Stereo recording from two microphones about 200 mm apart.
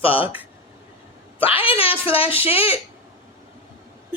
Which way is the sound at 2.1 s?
30° left (ahead or behind).